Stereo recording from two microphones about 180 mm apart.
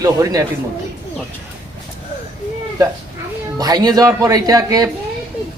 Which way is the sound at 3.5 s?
20° right (ahead or behind).